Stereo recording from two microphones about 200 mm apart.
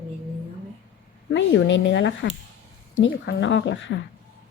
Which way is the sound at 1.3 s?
60° left (ahead or behind).